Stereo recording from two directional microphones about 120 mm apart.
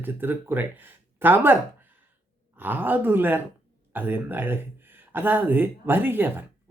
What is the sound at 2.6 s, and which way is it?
Speech, 15° right (ahead or behind).